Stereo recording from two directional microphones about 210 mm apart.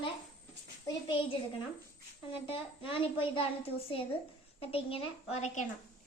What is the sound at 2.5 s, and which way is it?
Speech, 25° left (ahead or behind).